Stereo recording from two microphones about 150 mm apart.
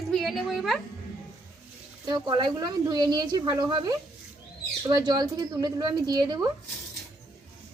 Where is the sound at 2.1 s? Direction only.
30° right (ahead or behind).